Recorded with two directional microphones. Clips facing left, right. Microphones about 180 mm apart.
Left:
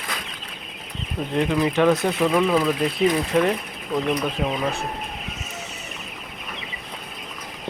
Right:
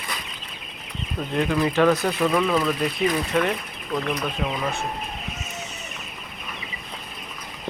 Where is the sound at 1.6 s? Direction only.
15° left (ahead or behind).